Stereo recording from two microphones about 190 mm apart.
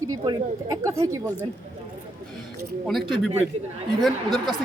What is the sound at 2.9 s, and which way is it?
Speech, centre (ahead or behind).